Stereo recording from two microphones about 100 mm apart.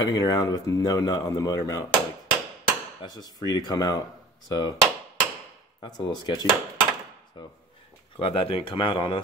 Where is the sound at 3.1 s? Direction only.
40° left (ahead or behind).